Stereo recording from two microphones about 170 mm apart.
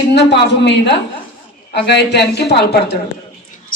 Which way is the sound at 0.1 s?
90° left.